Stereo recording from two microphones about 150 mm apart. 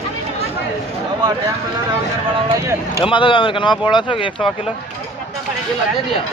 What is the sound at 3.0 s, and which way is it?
Speech, 35° left (ahead or behind).